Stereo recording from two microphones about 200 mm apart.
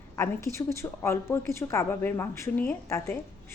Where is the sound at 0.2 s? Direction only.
15° left (ahead or behind).